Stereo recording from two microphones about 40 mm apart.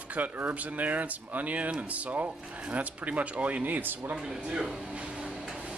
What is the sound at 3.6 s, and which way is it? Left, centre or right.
Speech, right.